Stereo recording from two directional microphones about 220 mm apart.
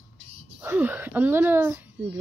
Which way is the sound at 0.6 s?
10° right (ahead or behind).